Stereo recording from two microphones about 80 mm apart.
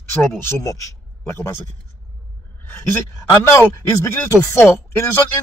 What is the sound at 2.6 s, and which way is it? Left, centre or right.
Speech, left.